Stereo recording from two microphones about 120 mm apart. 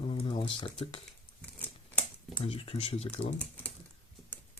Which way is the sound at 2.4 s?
50° left (ahead or behind).